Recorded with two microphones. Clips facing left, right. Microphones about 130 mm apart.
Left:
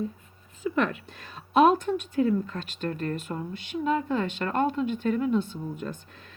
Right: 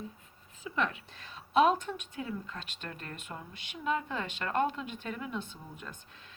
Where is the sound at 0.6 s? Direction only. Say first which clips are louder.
Left 7 dB; 55° left (ahead or behind); by 5.5 s 35° left (ahead or behind).